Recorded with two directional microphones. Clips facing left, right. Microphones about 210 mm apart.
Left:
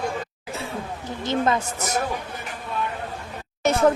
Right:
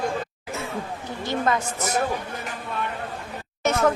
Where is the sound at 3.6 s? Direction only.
35° left (ahead or behind).